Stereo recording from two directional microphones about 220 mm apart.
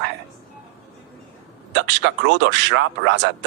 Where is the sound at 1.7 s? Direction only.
55° right (ahead or behind).